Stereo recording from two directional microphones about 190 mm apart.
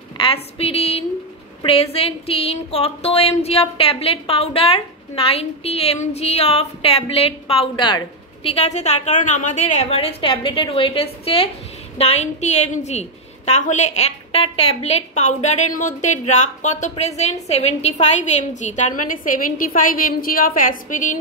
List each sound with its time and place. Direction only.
0.2 s speech: 30° left (ahead or behind)